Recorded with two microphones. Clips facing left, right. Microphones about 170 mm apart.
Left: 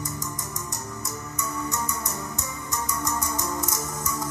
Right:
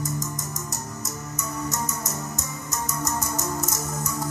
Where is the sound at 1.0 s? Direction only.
40° right (ahead or behind).